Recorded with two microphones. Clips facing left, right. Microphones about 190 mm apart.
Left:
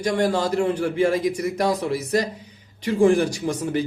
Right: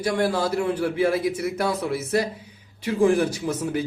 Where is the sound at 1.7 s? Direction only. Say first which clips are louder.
Left 2 dB; 35° left (ahead or behind).